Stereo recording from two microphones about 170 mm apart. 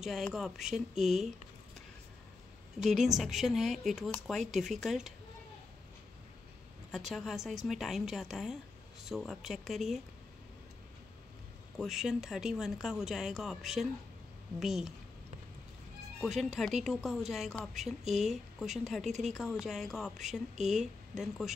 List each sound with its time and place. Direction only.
0.0 s a woman's voice: centre (ahead or behind)
2.8 s a woman's voice: centre (ahead or behind)
7.1 s a woman's voice: centre (ahead or behind)
11.7 s a woman's voice: 5° right (ahead or behind)
16.2 s a woman's voice: centre (ahead or behind)
20.5 s speech: 45° right (ahead or behind)
21.1 s a woman's voice: centre (ahead or behind)